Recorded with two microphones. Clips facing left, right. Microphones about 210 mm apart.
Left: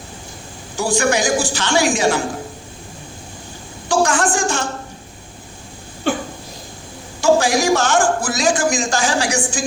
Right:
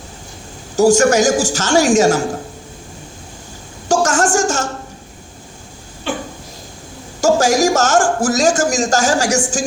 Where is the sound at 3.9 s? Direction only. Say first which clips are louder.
Right 2 dB; 45° right (ahead or behind).